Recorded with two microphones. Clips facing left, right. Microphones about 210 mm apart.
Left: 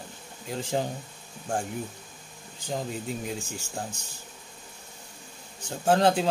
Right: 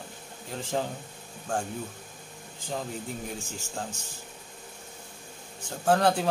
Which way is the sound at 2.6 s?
20° left (ahead or behind).